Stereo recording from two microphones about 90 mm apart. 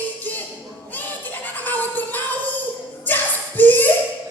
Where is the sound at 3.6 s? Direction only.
20° left (ahead or behind).